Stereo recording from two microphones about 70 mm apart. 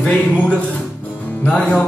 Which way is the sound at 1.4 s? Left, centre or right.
Centre.